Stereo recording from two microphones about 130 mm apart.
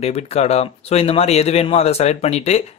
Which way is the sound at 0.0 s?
55° left (ahead or behind).